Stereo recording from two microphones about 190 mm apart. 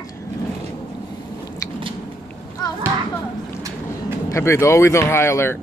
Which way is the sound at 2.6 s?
20° left (ahead or behind).